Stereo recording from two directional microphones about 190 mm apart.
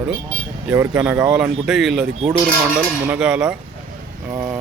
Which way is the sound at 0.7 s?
10° right (ahead or behind).